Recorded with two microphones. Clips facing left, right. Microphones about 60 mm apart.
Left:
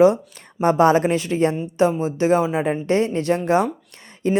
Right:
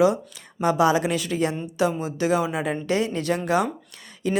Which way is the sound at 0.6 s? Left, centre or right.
Left.